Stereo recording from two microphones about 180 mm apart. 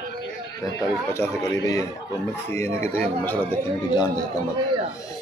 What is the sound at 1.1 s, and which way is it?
A man's voice, 15° left (ahead or behind).